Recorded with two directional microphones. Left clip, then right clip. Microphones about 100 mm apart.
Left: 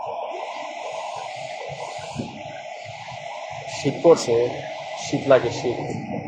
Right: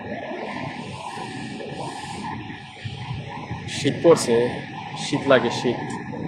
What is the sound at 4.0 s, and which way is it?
Speech, 30° right (ahead or behind).